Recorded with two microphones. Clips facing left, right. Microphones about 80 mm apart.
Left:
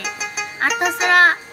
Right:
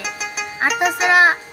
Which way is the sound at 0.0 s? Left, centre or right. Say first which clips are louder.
Even; centre.